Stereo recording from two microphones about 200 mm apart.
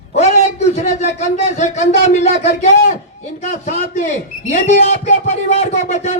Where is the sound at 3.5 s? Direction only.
40° left (ahead or behind).